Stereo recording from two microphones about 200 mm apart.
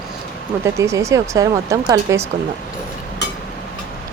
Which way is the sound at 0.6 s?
15° right (ahead or behind).